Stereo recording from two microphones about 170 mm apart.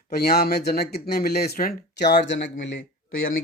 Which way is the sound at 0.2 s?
65° left (ahead or behind).